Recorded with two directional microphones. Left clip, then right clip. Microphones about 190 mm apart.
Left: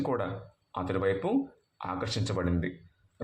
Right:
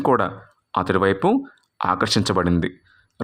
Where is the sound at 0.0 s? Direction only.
45° right (ahead or behind).